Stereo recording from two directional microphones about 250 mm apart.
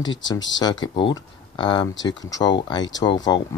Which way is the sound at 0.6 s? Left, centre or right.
Centre.